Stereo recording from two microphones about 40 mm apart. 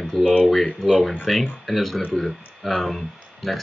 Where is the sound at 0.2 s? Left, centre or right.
Right.